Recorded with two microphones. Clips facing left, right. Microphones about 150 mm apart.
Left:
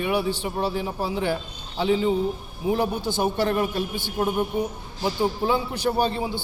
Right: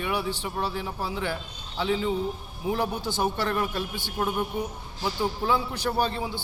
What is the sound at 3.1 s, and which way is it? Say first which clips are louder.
A man's voice: left 4 dB; 10° left (ahead or behind).